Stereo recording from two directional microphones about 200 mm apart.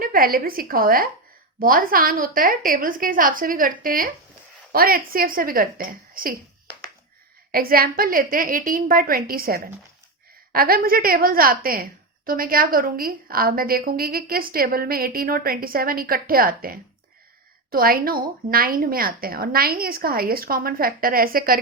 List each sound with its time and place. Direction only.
0.0 s a woman's voice: 45° right (ahead or behind)
7.5 s a woman's voice: 45° right (ahead or behind)